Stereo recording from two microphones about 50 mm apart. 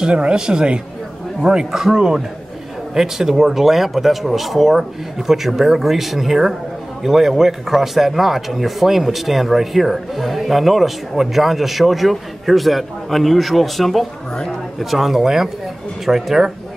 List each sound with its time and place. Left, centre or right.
0.0 s speech: centre